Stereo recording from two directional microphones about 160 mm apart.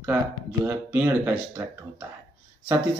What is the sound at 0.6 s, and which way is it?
Speech, 10° right (ahead or behind).